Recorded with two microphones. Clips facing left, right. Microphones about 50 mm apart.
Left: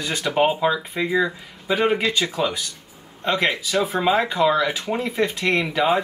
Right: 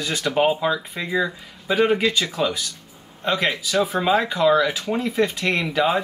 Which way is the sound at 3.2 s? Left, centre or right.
Centre.